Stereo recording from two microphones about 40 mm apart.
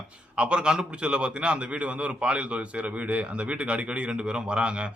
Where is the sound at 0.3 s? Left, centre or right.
Right.